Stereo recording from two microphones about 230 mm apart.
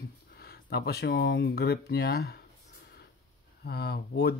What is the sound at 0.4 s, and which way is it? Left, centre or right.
Speech, left.